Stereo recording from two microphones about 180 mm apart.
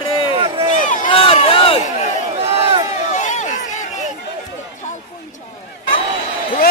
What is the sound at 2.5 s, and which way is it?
Crowd, 35° right (ahead or behind).